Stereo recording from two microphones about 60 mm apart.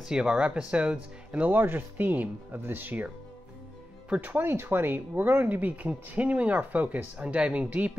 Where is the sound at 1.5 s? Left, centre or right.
Right.